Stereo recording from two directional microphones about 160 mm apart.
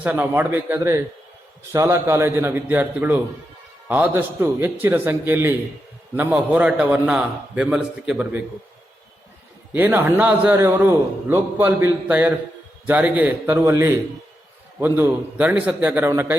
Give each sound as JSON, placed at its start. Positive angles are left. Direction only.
{"t": 0.0, "sound": "a man's voice", "side_deg": -10}
{"t": 9.7, "sound": "a man's voice", "side_deg": -15}